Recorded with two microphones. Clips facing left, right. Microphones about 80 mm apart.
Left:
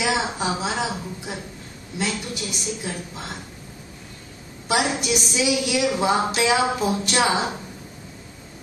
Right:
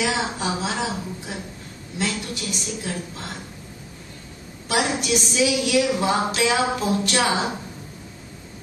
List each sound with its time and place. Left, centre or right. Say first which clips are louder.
0.0 s a woman's voice: left 1 dB; left
5.0 s a woman's voice: right 1 dB; centre